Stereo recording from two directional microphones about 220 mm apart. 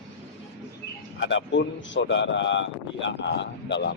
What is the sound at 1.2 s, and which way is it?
A man's voice, 55° left (ahead or behind).